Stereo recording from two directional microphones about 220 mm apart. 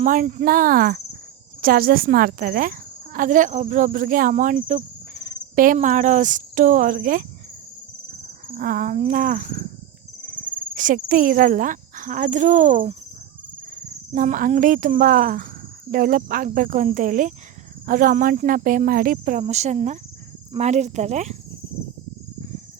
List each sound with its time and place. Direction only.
0.0 s speech: 35° right (ahead or behind)
8.4 s speech: 40° right (ahead or behind)